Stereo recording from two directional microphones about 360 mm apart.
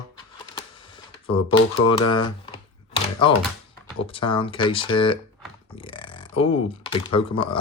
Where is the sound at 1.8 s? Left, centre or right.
Left.